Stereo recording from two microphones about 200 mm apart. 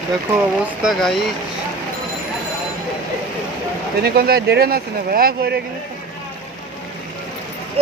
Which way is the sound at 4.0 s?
50° right (ahead or behind).